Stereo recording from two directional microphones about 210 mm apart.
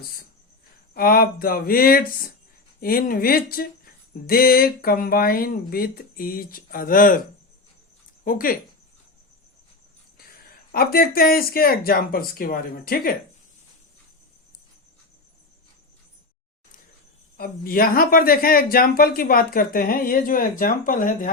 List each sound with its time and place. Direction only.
0.9 s speech: 45° left (ahead or behind)
8.2 s speech: 40° left (ahead or behind)
10.7 s speech: 45° left (ahead or behind)
17.3 s speech: 45° left (ahead or behind)